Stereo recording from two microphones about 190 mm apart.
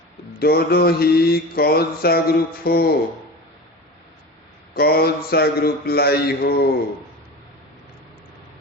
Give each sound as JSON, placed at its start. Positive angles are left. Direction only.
{"t": 0.3, "sound": "mantra", "side_deg": 55}
{"t": 2.6, "sound": "speech", "side_deg": 55}
{"t": 4.7, "sound": "speech", "side_deg": 55}